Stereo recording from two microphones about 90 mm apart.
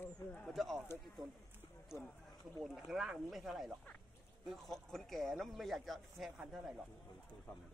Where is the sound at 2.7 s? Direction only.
5° right (ahead or behind).